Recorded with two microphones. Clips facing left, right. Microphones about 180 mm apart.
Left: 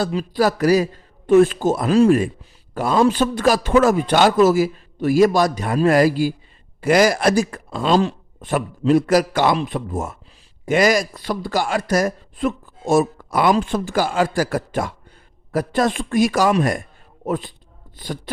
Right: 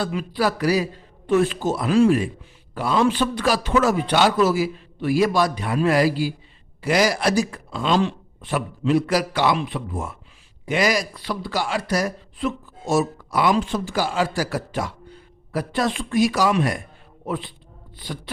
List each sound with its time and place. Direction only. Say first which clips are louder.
0.0 s speech: left 4 dB; 35° left (ahead or behind)